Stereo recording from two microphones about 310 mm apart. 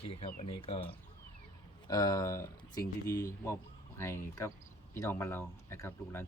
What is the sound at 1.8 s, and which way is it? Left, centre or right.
Speech, centre.